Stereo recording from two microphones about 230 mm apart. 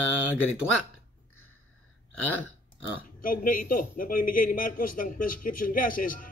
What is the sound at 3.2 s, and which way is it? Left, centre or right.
A man's voice, left.